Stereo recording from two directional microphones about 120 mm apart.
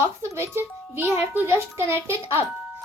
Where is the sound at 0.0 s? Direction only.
20° right (ahead or behind).